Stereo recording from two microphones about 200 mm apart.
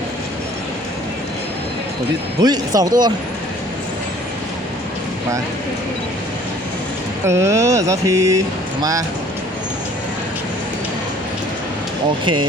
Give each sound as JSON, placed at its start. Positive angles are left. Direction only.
{"t": 2.4, "sound": "speech", "side_deg": -20}
{"t": 7.3, "sound": "mantra", "side_deg": -15}